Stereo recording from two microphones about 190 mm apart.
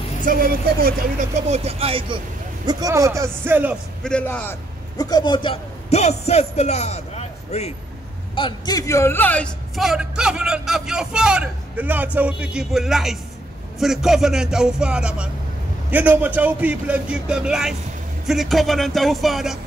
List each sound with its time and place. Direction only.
0.2 s speech: 45° right (ahead or behind)
1.3 s a man's voice: 35° right (ahead or behind); by 3.7 s 10° right (ahead or behind)
4.0 s a man's voice: 5° left (ahead or behind); by 7.7 s 35° left (ahead or behind)
8.4 s a man's voice: 25° left (ahead or behind); by 19.6 s centre (ahead or behind)